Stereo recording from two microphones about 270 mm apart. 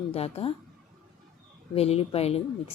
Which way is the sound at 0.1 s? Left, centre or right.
Left.